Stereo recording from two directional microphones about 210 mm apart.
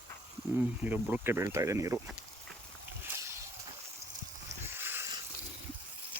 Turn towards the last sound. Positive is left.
turn(degrees=-10)  # may be behind; listen again after turning